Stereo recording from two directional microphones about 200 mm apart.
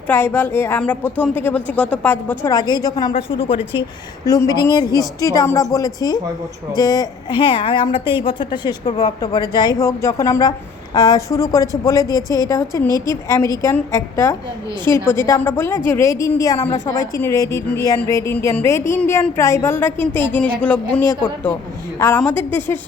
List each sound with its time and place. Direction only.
0.1 s a woman's voice: 10° left (ahead or behind)